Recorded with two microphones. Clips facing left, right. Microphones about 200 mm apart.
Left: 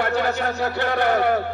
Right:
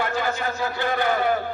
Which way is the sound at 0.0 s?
65° left (ahead or behind).